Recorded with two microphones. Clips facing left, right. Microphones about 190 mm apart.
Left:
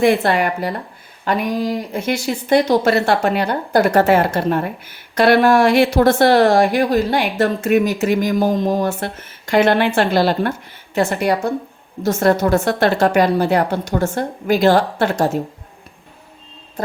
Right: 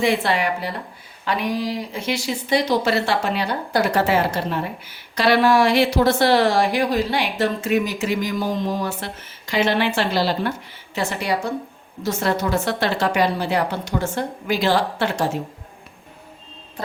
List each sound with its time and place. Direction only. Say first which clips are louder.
0.0 s speech: left 5 dB; 50° left (ahead or behind)